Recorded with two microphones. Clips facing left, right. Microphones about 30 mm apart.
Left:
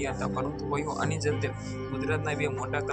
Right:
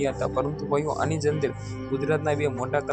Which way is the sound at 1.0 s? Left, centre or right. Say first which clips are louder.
Right 5 dB; centre.